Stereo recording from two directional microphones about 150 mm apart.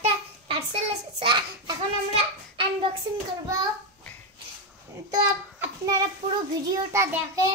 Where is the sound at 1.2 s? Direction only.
30° right (ahead or behind).